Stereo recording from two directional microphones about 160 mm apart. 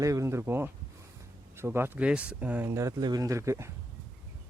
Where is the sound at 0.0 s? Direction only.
20° right (ahead or behind).